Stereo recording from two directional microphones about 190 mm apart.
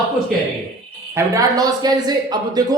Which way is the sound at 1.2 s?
20° right (ahead or behind).